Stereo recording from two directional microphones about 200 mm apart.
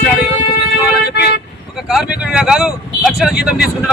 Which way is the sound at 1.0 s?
55° left (ahead or behind).